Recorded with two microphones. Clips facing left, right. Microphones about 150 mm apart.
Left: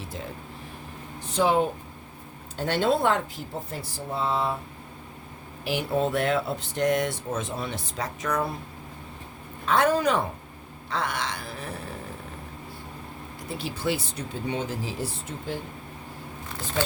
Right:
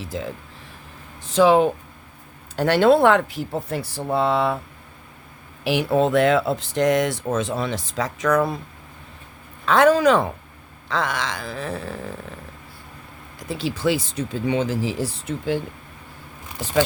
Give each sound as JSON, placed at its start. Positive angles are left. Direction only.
{"t": 0.1, "sound": "speech", "side_deg": -90}
{"t": 2.6, "sound": "speech", "side_deg": -80}
{"t": 5.6, "sound": "speech", "side_deg": -85}
{"t": 9.6, "sound": "speech", "side_deg": -90}
{"t": 13.5, "sound": "speech", "side_deg": -90}